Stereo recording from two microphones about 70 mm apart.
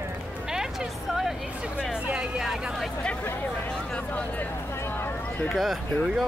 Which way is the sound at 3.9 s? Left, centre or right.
Centre.